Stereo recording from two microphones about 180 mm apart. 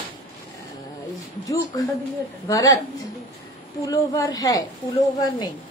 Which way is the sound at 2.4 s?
20° left (ahead or behind).